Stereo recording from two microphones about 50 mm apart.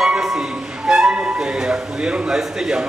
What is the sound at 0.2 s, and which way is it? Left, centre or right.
Music, centre.